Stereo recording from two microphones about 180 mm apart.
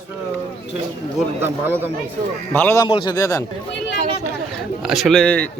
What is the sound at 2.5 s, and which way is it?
Speech, 10° left (ahead or behind).